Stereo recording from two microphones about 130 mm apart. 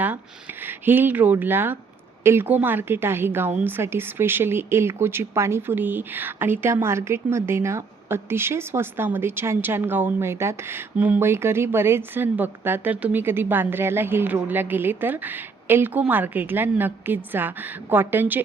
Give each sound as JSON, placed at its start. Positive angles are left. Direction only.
{"t": 0.6, "sound": "speech", "side_deg": -15}